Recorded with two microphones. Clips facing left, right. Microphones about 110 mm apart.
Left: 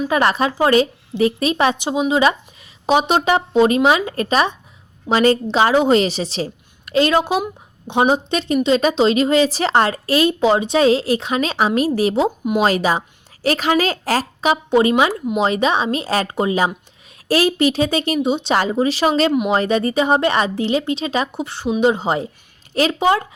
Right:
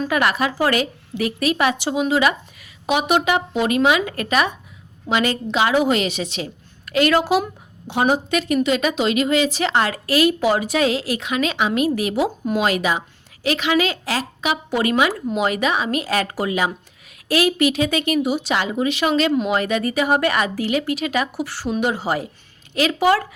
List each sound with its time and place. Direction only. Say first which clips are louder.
0.1 s a woman's voice: left 4 dB; 30° left (ahead or behind)
18.5 s a woman's voice: left 4 dB; 35° left (ahead or behind)
22.7 s speech: left 2 dB; 35° left (ahead or behind)
23.0 s speech: right 1 dB; 20° left (ahead or behind)